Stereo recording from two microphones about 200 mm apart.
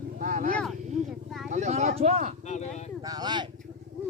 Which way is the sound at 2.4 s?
35° left (ahead or behind).